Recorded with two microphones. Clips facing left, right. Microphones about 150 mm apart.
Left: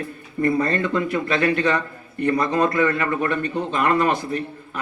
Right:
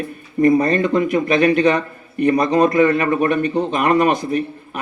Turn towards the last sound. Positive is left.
turn(degrees=-20)  # may be behind; listen again after turning